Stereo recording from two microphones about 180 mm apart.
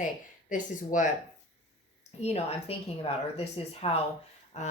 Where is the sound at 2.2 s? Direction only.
35° left (ahead or behind).